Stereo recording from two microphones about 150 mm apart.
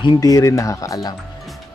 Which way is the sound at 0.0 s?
25° left (ahead or behind).